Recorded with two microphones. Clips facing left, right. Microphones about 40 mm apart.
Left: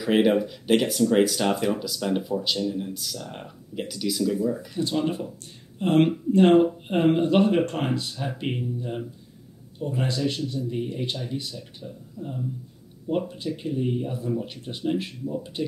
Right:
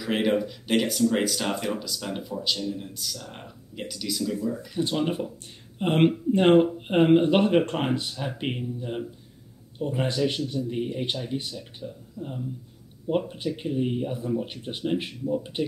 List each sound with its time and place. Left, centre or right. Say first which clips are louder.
0.0 s speech: left 4 dB; centre
4.7 s speech: right 3 dB; centre
11.8 s speech: right 3 dB; centre
13.1 s speech: even; right